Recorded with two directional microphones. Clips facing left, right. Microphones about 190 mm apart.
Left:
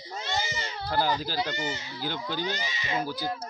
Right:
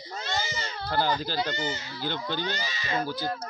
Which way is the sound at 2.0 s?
5° left (ahead or behind).